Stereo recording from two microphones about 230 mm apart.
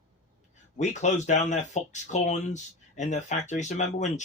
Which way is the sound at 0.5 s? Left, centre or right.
Left.